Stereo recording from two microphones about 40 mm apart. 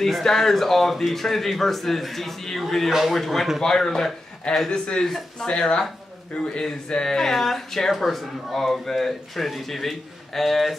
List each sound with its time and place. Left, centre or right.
0.0 s speech: centre
3.6 s speech: centre
4.6 s speech: left
5.0 s speech: centre
5.5 s speech: left; by 10.8 s centre